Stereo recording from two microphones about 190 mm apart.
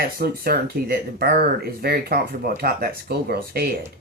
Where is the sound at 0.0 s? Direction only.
50° right (ahead or behind).